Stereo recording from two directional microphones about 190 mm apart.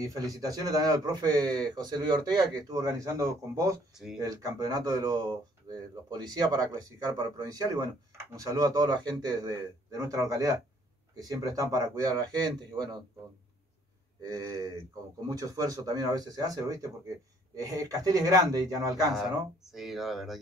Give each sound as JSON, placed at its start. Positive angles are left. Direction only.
{"t": 0.0, "sound": "a man's voice", "side_deg": -20}
{"t": 2.7, "sound": "a man's voice", "side_deg": -20}
{"t": 14.2, "sound": "a man's voice", "side_deg": -20}
{"t": 19.1, "sound": "speech", "side_deg": 0}